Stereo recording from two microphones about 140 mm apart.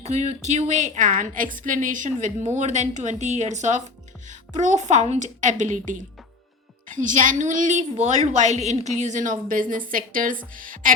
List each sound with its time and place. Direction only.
0.0 s a woman's voice: 55° right (ahead or behind); by 10.9 s 75° right (ahead or behind)